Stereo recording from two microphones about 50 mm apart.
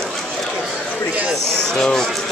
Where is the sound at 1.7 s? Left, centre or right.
Centre.